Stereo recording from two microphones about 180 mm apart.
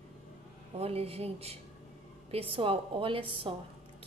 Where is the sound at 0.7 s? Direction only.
35° right (ahead or behind).